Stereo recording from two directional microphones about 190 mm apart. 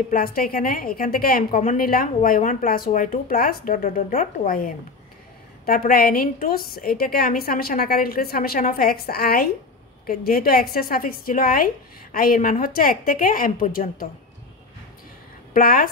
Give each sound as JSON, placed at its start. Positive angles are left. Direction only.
{"t": 0.1, "sound": "a woman's voice", "side_deg": 50}
{"t": 15.5, "sound": "a woman's voice", "side_deg": 50}